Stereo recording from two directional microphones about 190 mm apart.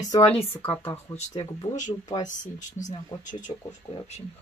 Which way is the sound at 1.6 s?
40° left (ahead or behind).